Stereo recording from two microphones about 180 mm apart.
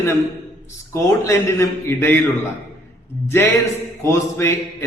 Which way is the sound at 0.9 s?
15° left (ahead or behind).